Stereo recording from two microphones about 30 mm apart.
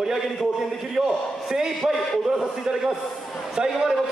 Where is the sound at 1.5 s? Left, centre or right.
Centre.